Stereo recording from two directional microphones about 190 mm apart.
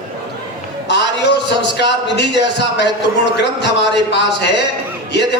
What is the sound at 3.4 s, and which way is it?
Speech, 65° left (ahead or behind).